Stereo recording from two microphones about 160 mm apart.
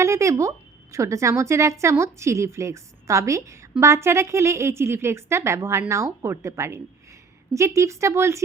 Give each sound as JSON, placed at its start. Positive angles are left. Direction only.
{"t": 0.0, "sound": "a woman's voice", "side_deg": -20}